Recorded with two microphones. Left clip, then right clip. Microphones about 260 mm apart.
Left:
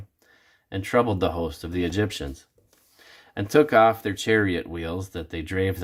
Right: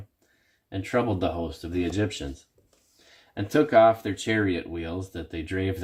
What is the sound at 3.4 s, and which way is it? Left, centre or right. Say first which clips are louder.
Speech: left 1 dB; centre.